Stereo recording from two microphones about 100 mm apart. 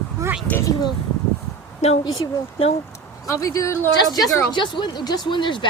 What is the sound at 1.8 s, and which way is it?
Speech, 90° left.